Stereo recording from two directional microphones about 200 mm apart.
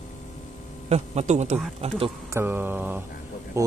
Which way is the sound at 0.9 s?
35° right (ahead or behind).